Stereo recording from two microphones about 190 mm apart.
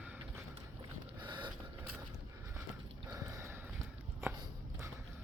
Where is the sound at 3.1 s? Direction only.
15° right (ahead or behind).